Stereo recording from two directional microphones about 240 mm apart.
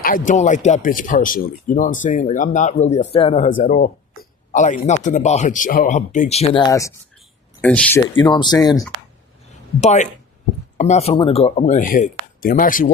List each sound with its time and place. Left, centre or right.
0.0 s speech: left
3.6 s speech: left; by 8.0 s centre
8.1 s speech: centre
9.8 s speech: left